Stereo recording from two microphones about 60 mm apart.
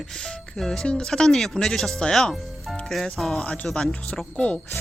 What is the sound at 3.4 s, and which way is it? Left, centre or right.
Speech, centre.